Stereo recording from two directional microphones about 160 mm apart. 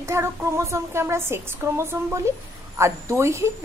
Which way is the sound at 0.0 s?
15° right (ahead or behind).